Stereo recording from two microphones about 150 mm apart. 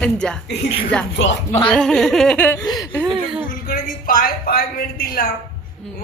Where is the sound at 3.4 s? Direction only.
80° left.